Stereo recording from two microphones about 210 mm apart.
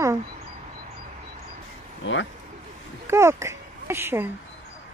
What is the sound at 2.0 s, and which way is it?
Speech, 65° left (ahead or behind).